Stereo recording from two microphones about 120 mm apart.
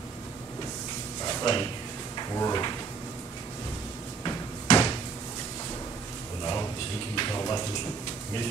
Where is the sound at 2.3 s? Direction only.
30° left (ahead or behind).